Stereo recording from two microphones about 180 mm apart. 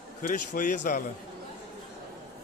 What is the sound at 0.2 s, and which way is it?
Speech, 50° left (ahead or behind).